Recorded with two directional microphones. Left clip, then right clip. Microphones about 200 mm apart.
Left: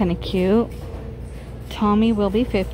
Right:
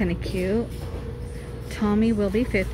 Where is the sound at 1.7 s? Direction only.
10° left (ahead or behind).